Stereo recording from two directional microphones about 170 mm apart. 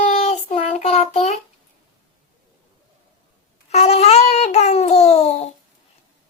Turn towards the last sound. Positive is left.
turn(degrees=40)  # may be behind; listen again after turning